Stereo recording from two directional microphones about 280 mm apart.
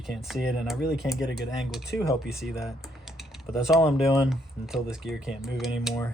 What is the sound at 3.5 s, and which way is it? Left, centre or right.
Speech, centre.